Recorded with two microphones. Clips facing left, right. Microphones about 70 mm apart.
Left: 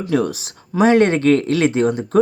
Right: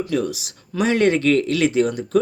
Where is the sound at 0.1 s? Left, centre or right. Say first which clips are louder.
Left 4 dB; left.